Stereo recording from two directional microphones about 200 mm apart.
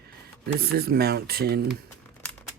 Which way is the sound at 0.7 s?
50° right (ahead or behind).